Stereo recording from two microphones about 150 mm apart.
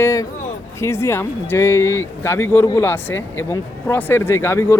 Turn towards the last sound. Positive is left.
turn(degrees=15)  # may be behind; listen again after turning